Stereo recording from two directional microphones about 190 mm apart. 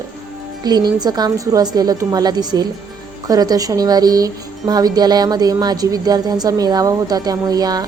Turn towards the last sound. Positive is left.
turn(degrees=-20)  # may be behind; listen again after turning